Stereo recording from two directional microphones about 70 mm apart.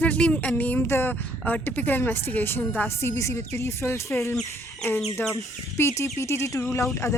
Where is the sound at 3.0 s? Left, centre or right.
Left.